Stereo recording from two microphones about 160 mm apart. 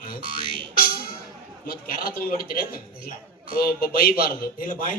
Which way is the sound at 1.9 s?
65° left (ahead or behind).